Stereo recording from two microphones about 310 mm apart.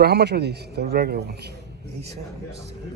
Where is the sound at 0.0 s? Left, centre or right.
Right.